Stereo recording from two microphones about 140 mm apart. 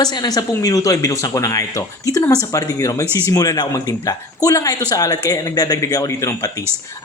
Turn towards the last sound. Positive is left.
turn(degrees=25)  # may be behind; listen again after turning